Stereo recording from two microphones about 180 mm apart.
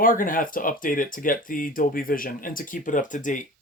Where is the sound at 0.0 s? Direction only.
50° left (ahead or behind).